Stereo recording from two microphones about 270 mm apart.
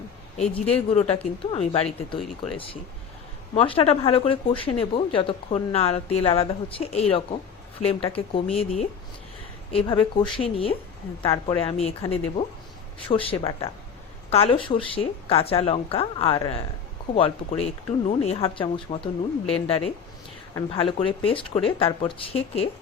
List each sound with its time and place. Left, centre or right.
0.3 s a woman's voice: left
2.2 s speech: centre
3.5 s a woman's voice: centre